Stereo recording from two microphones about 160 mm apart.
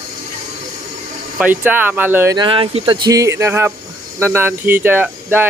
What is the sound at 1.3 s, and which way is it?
Speech, 10° right (ahead or behind).